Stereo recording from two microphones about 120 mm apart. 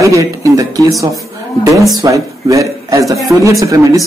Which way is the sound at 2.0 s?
25° right (ahead or behind).